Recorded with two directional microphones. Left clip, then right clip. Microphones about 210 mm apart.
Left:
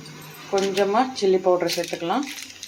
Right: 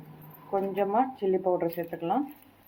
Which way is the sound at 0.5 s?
15° left (ahead or behind).